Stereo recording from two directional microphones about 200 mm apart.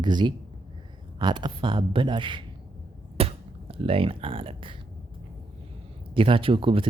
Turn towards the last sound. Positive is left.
turn(degrees=-25)  # may be behind; listen again after turning